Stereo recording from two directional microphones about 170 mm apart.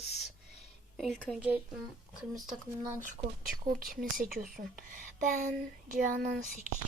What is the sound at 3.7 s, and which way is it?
A woman's voice, 60° right (ahead or behind).